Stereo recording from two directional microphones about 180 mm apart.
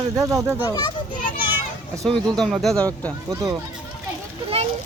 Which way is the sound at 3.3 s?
20° right (ahead or behind).